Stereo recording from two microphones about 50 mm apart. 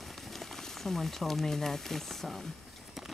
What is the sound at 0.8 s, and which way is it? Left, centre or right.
Speech, centre.